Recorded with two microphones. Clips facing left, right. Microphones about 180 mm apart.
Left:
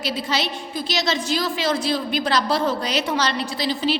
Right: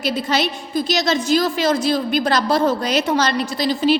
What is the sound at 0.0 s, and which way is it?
A woman's voice, 50° right (ahead or behind).